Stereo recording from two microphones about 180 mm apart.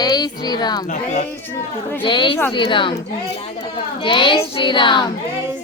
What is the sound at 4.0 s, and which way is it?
Child singing, 25° left (ahead or behind).